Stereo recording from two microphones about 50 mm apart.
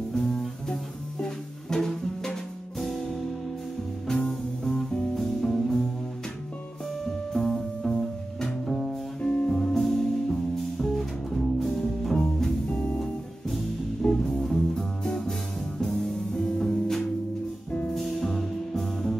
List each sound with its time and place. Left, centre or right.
0.1 s music: centre
4.1 s music: centre
7.3 s music: centre
9.2 s music: left
9.6 s music: centre
12.7 s music: left
13.0 s music: centre